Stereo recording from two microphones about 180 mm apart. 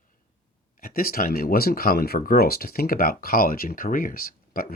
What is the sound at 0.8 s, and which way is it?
Speech, 55° left (ahead or behind).